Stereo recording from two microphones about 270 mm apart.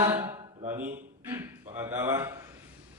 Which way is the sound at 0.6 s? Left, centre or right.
Right.